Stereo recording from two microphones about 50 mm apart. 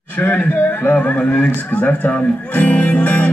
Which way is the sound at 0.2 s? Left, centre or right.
Left.